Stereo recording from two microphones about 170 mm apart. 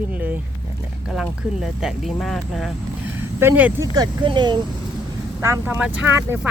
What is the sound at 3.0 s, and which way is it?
Vehicle, 15° right (ahead or behind).